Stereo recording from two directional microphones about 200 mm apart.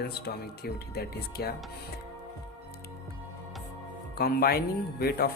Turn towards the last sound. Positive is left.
turn(degrees=50)  # may be behind; listen again after turning